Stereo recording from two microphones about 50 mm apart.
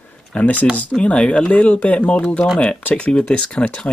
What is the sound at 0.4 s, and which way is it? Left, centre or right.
Speech, left.